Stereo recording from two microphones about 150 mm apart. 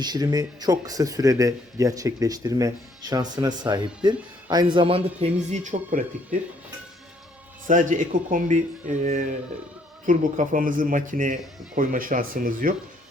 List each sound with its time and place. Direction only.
0.0 s speech: 25° right (ahead or behind); by 6.0 s 50° right (ahead or behind)
7.7 s speech: 60° right (ahead or behind)